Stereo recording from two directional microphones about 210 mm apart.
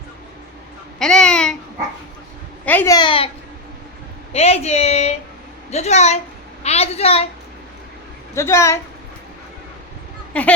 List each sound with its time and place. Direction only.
0.9 s babbling: 5° left (ahead or behind)
2.6 s a child's voice: 10° left (ahead or behind)
4.3 s a child's voice: 30° left (ahead or behind)
8.4 s speech: 15° left (ahead or behind)
10.3 s speech: 5° left (ahead or behind)